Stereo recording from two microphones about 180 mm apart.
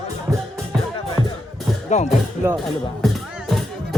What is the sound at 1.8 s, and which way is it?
Music, 40° left (ahead or behind).